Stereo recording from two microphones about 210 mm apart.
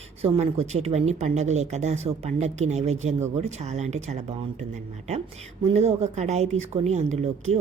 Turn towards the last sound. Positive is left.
turn(degrees=-30)  # may be behind; listen again after turning